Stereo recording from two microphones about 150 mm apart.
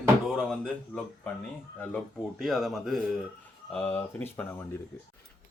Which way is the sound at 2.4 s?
Centre (ahead or behind).